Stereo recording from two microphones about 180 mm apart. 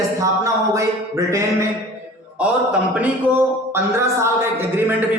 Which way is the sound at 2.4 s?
5° right (ahead or behind).